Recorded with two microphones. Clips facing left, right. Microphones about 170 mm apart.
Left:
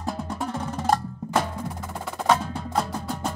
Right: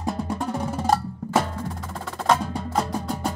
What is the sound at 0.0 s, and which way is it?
Drum, 5° right (ahead or behind).